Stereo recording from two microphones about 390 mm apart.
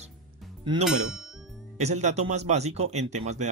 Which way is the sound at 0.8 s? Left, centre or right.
Centre.